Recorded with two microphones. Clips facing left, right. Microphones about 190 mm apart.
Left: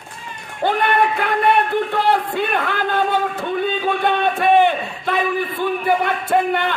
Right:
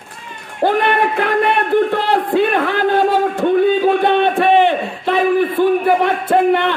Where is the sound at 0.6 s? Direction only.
35° right (ahead or behind).